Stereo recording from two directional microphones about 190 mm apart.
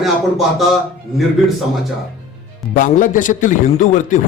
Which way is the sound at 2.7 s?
45° left (ahead or behind).